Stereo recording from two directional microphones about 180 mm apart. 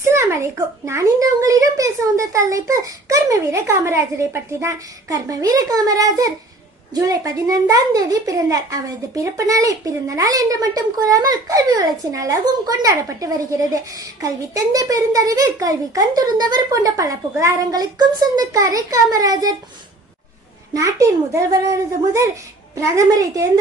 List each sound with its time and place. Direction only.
0.0 s a sound: 15° right (ahead or behind)
0.9 s a woman's voice: 15° right (ahead or behind)
20.7 s a child's voice: 20° right (ahead or behind)